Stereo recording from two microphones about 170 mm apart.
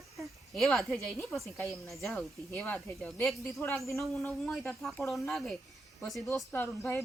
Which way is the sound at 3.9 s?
Centre (ahead or behind).